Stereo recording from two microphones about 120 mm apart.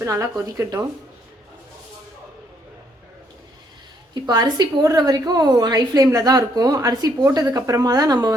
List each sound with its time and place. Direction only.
0.0 s speech: 25° right (ahead or behind)
4.1 s a woman's voice: 35° right (ahead or behind)